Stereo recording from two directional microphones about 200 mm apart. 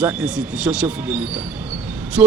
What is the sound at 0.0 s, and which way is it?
A man's voice, 5° right (ahead or behind).